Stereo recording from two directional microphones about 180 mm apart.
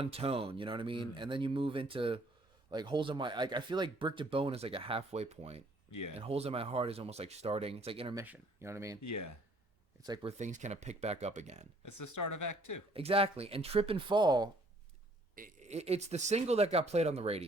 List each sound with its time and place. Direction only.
0.0 s speech: 35° right (ahead or behind)
8.1 s speech: 15° right (ahead or behind)
10.2 s speech: 40° right (ahead or behind)
12.9 s speech: 30° right (ahead or behind)
15.4 s speech: 45° right (ahead or behind)